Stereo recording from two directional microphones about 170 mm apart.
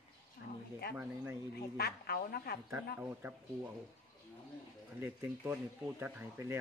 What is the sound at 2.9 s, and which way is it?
Speech, 10° right (ahead or behind).